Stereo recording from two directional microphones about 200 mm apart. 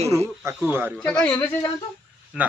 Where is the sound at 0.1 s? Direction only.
15° right (ahead or behind).